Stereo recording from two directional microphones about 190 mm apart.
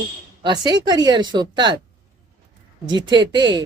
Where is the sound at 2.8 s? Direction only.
20° right (ahead or behind).